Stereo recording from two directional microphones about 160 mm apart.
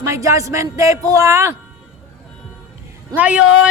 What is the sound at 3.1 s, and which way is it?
Speech, 10° right (ahead or behind).